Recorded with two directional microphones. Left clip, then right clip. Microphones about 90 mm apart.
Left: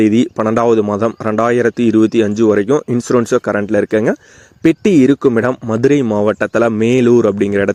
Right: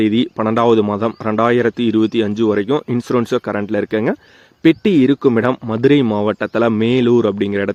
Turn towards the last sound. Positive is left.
turn(degrees=35)  # may be behind; listen again after turning